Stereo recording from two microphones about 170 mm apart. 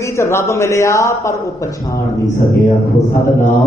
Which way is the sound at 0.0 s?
15° left (ahead or behind).